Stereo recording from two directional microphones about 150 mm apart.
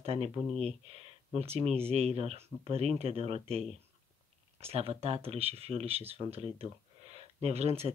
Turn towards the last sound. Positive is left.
turn(degrees=-45)  # may be behind; listen again after turning